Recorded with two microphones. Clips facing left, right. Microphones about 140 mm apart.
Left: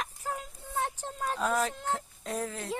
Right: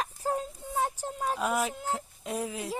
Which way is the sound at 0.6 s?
15° right (ahead or behind).